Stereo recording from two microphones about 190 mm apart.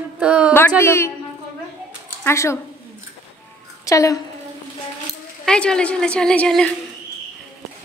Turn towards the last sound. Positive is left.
turn(degrees=5)  # may be behind; listen again after turning